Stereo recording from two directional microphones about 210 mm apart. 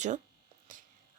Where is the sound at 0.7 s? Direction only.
40° right (ahead or behind).